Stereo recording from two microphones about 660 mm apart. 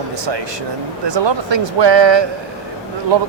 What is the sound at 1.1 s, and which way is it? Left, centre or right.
Speech, right.